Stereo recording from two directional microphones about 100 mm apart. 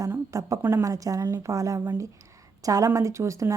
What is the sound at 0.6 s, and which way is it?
A woman's voice, 25° right (ahead or behind).